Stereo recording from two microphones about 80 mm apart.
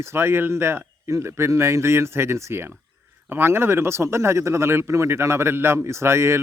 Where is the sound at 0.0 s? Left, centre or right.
Right.